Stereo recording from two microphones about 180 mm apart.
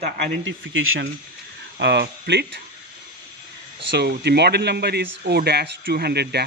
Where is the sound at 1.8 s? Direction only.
70° right (ahead or behind).